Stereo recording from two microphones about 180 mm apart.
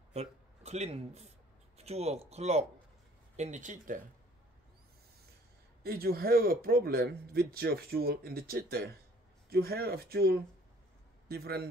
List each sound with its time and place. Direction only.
0.1 s speech: 35° right (ahead or behind)
5.9 s speech: 60° right (ahead or behind)